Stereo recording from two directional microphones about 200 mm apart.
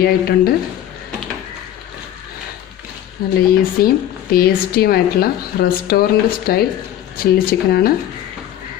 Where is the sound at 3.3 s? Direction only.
50° left (ahead or behind).